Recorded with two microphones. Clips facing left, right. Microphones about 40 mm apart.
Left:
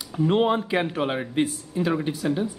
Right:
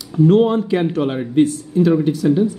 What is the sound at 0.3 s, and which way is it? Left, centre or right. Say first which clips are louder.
Speech: right 6 dB; left.